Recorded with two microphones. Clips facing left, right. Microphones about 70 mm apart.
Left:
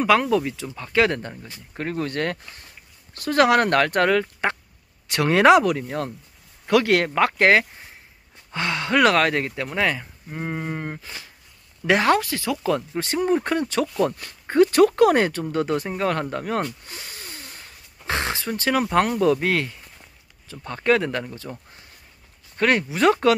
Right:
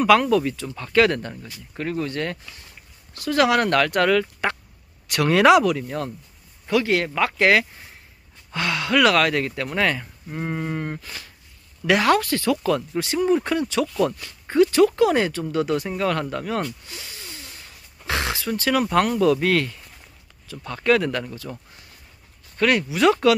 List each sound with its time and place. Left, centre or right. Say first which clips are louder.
0.0 s speech: right 2 dB; left
1.8 s speech: right 1 dB; left
2.0 s speech: left 2 dB; left
6.7 s speech: left 2 dB; left
8.5 s speech: right 1 dB; left
9.6 s speech: right 1 dB; centre; by 12.2 s left
12.2 s speech: right 4 dB; centre
13.0 s speech: right 1 dB; left
22.6 s speech: right 1 dB; left